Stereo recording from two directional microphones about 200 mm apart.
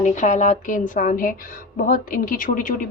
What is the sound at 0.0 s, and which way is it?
A woman's voice, 35° left (ahead or behind).